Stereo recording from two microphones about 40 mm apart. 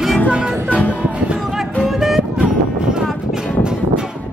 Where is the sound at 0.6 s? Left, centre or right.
Left.